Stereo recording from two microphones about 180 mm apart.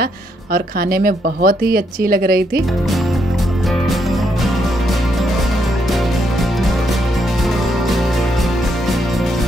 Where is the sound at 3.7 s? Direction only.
Centre (ahead or behind).